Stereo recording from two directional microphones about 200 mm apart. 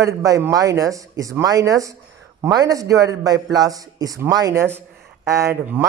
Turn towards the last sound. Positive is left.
turn(degrees=-10)  # may be behind; listen again after turning